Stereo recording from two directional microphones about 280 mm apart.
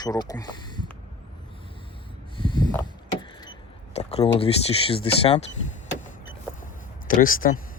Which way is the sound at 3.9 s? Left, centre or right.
Left.